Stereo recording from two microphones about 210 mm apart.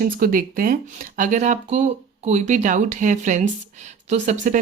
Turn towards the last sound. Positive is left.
turn(degrees=-35)  # may be behind; listen again after turning